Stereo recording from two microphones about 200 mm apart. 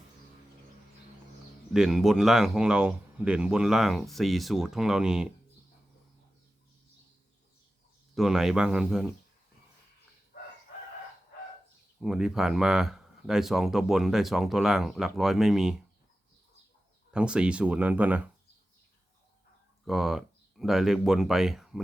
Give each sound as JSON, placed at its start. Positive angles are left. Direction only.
{"t": 1.7, "sound": "speech", "side_deg": 0}
{"t": 8.1, "sound": "speech", "side_deg": 0}
{"t": 10.3, "sound": "chicken", "side_deg": 45}
{"t": 12.0, "sound": "speech", "side_deg": -5}
{"t": 17.1, "sound": "speech", "side_deg": -5}
{"t": 19.8, "sound": "speech", "side_deg": 0}